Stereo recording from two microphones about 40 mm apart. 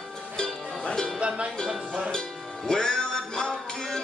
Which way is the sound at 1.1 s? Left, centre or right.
Right.